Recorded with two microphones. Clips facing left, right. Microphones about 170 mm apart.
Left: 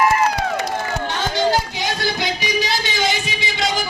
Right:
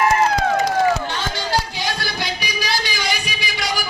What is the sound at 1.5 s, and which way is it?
Music, 20° left (ahead or behind).